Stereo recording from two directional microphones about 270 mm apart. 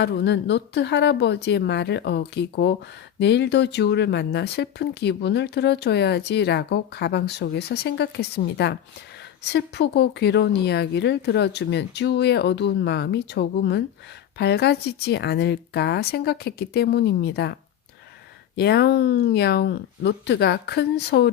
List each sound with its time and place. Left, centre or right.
0.0 s speech: left